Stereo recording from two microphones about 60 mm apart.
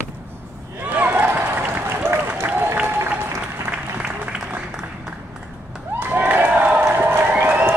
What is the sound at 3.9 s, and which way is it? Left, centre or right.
Applause, right.